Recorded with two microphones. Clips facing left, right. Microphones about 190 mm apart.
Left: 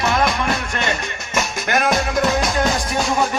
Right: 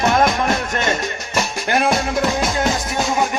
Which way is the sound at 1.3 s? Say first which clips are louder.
Right 1 dB; 30° right (ahead or behind).